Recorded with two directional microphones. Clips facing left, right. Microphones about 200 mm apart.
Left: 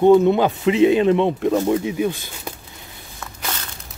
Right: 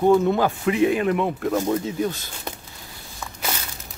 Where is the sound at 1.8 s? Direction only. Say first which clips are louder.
Left 3 dB; 15° left (ahead or behind).